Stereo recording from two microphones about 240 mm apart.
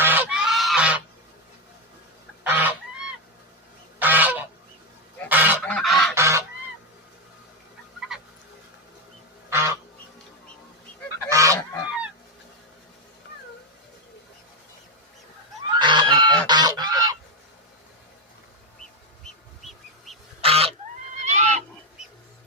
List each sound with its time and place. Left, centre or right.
0.0 s goose: centre
2.4 s goose: centre
4.0 s goose: centre
6.1 s goose: centre
9.5 s duck: centre
11.3 s goose: centre
15.8 s goat: centre
16.5 s goose: centre
19.2 s bird: centre
20.4 s goose: right
21.2 s a sound: right